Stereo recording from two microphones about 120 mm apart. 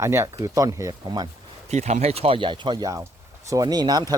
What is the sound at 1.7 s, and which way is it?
Speech, 70° right (ahead or behind).